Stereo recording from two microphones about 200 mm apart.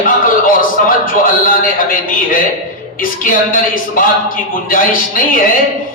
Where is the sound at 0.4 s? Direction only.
45° left (ahead or behind).